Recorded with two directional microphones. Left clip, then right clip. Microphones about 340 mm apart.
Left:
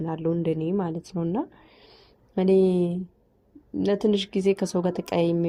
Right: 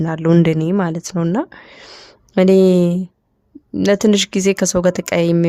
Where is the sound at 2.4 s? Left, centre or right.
Right.